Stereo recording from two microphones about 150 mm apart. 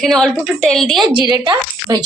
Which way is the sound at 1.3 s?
25° right (ahead or behind).